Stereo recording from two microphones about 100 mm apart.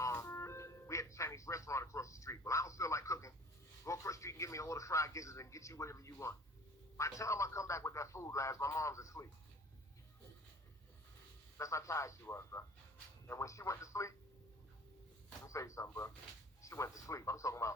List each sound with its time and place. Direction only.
0.0 s music: 30° left (ahead or behind)
3.8 s a man's voice: 30° left (ahead or behind)
11.5 s a man's voice: 30° left (ahead or behind)
15.4 s a man's voice: 30° left (ahead or behind)